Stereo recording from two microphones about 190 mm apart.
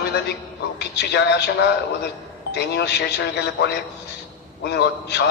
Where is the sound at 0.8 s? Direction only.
65° left (ahead or behind).